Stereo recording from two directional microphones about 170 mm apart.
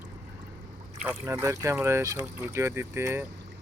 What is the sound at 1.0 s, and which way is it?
Speech, 15° right (ahead or behind).